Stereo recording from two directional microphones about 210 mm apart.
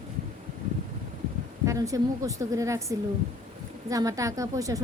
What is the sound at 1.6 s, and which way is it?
A woman's voice, 15° right (ahead or behind).